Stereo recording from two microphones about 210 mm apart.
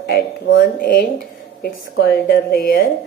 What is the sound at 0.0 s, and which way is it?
A woman's voice, 50° left (ahead or behind).